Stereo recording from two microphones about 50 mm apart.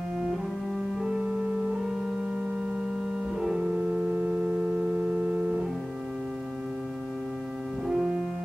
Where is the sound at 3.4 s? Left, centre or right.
Centre.